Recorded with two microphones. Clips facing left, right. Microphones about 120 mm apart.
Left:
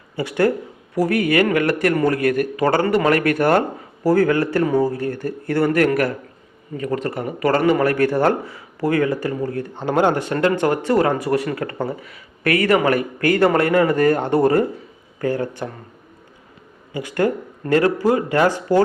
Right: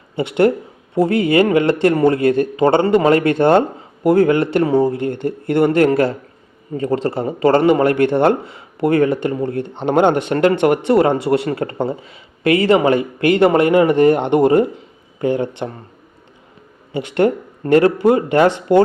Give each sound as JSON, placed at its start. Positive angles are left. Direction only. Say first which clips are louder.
{"t": 0.2, "sound": "a man's voice", "louder": "right 4 dB", "side_deg": -25}
{"t": 16.9, "sound": "a man's voice", "louder": "right 4 dB", "side_deg": -25}